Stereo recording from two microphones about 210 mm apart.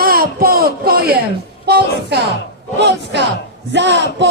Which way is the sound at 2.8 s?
55° right (ahead or behind).